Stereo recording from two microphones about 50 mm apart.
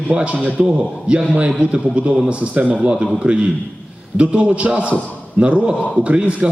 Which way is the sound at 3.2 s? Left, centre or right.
Right.